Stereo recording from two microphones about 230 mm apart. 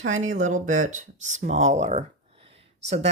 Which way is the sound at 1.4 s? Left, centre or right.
Right.